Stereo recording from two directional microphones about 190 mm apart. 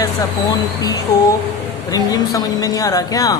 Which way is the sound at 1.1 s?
20° left (ahead or behind).